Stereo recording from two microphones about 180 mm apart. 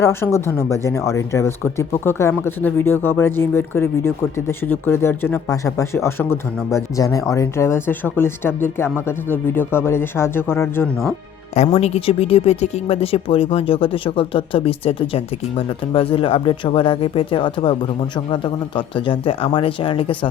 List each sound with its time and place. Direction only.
0.0 s speech: 15° left (ahead or behind)
11.5 s speech: 35° left (ahead or behind)